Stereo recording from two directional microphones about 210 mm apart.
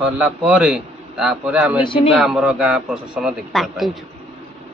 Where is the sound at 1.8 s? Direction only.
25° left (ahead or behind).